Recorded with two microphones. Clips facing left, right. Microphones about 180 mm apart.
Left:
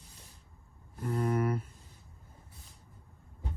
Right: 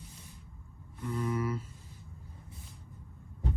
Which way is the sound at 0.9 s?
40° left (ahead or behind).